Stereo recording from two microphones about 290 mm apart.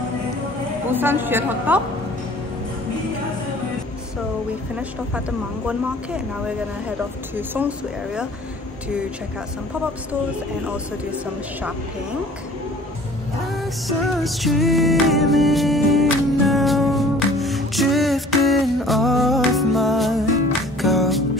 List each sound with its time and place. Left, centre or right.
0.9 s a woman's voice: centre
7.3 s speech: centre
13.6 s music: centre